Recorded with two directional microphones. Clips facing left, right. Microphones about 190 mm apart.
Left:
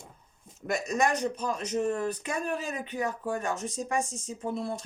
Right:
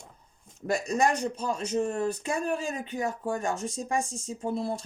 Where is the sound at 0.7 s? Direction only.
30° right (ahead or behind).